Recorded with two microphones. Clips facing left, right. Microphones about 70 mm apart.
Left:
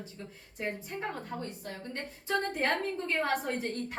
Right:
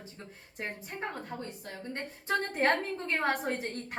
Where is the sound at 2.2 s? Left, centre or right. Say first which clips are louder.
Right 2 dB; right.